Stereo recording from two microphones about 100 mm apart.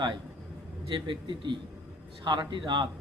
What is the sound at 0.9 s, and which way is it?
A man's voice, 55° right (ahead or behind).